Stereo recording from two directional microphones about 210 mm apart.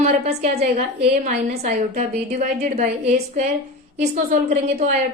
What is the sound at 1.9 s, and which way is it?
A woman's voice, 30° right (ahead or behind).